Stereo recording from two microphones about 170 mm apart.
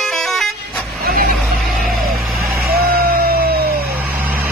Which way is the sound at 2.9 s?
60° right (ahead or behind).